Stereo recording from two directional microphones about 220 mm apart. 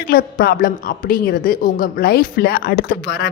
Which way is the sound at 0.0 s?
45° left (ahead or behind).